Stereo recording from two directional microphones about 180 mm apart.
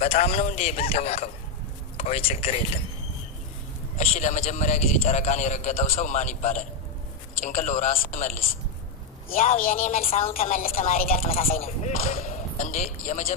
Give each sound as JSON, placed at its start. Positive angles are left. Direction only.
{"t": 0.0, "sound": "a man's voice", "side_deg": 35}
{"t": 3.9, "sound": "a man's voice", "side_deg": 40}
{"t": 10.0, "sound": "a man's voice", "side_deg": 35}
{"t": 10.3, "sound": "a man's voice", "side_deg": 50}